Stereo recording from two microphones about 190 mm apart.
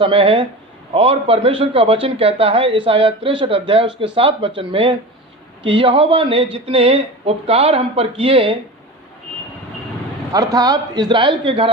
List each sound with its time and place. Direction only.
0.0 s speech: 30° right (ahead or behind)
10.3 s speech: 20° right (ahead or behind)